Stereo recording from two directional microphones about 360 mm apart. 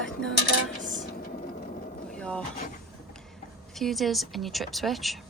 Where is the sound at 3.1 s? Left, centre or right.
Centre.